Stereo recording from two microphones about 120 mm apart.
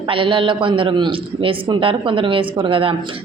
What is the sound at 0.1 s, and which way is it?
A woman's voice, 45° right (ahead or behind).